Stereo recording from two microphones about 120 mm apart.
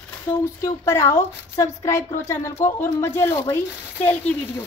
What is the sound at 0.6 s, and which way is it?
A child's voice, 20° left (ahead or behind).